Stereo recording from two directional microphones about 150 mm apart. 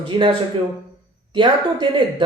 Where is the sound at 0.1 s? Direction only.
35° right (ahead or behind).